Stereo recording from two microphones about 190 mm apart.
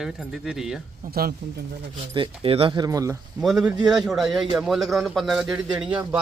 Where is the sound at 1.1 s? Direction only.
55° right (ahead or behind).